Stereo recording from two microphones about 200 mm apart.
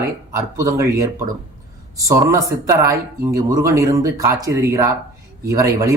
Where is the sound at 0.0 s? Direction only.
15° right (ahead or behind).